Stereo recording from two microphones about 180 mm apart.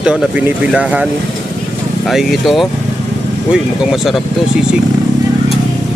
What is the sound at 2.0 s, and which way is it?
Speech, centre (ahead or behind).